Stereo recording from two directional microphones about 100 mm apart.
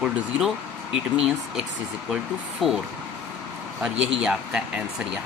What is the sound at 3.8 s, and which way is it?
A man's voice, 10° right (ahead or behind).